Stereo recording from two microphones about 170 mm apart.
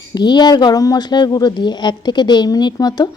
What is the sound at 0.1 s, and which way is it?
A woman's voice, 25° left (ahead or behind).